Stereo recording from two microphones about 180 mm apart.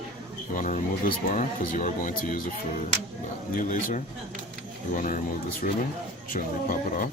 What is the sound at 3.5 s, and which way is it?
Speech, 45° left (ahead or behind).